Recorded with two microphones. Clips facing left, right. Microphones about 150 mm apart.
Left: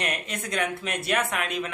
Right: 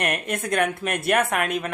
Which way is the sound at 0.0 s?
55° right (ahead or behind).